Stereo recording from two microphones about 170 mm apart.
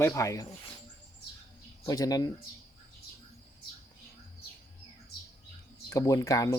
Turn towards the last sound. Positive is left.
turn(degrees=20)  # may be behind; listen again after turning